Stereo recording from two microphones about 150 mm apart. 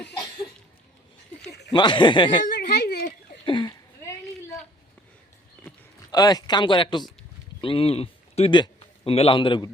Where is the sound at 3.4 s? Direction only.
30° left (ahead or behind).